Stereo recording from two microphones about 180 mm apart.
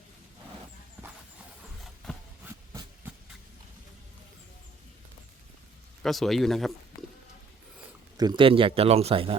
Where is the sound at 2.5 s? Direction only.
10° right (ahead or behind).